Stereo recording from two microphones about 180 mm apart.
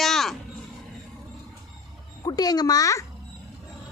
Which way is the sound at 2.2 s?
20° left (ahead or behind).